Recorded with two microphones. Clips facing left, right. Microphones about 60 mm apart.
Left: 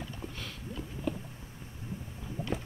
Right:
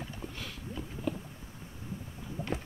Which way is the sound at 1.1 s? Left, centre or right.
Centre.